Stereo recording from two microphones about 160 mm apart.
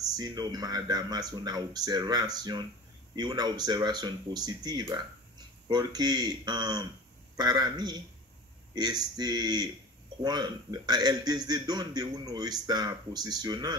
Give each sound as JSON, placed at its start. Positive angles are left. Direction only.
{"t": 0.1, "sound": "a man's voice", "side_deg": -25}